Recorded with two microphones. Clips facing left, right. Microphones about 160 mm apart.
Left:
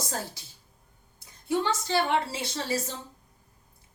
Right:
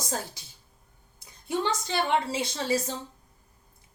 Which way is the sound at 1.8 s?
20° right (ahead or behind).